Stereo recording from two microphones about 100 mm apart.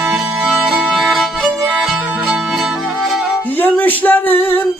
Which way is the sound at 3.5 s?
20° left (ahead or behind).